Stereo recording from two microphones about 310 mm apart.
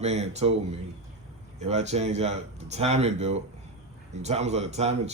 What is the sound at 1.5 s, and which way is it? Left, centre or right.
Speech, right.